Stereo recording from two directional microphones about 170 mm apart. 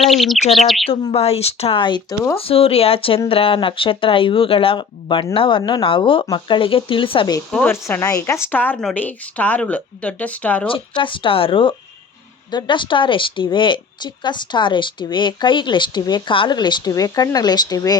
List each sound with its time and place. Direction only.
0.0 s bird: centre (ahead or behind)
0.9 s speech: 35° left (ahead or behind)
7.5 s a woman's voice: 10° left (ahead or behind)
10.7 s a woman's voice: 30° left (ahead or behind)